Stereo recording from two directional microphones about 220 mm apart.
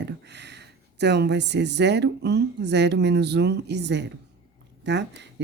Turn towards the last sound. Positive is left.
turn(degrees=-50)  # may be behind; listen again after turning